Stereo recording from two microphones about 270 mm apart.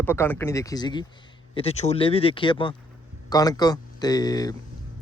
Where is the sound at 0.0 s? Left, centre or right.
Centre.